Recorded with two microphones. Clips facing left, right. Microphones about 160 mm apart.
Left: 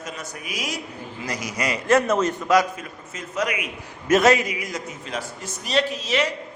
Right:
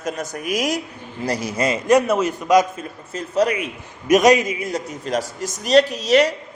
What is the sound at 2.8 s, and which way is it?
Speech, 35° right (ahead or behind).